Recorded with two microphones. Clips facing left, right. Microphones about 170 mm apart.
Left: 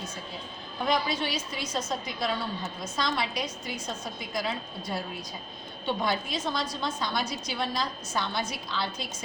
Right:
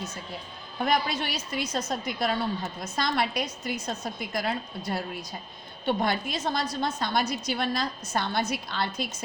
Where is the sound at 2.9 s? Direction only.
55° right (ahead or behind).